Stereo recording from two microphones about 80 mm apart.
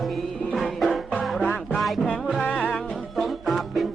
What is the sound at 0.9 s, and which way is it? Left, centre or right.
Music, centre.